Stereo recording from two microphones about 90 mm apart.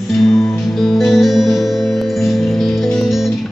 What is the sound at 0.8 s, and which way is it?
Music, centre (ahead or behind).